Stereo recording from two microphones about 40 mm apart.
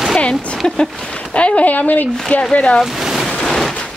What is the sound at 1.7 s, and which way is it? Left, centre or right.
Speech, left.